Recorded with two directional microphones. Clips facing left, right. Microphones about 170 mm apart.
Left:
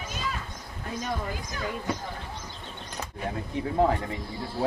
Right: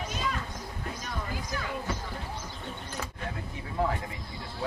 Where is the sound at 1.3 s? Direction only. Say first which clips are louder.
Left 1 dB; 20° left (ahead or behind).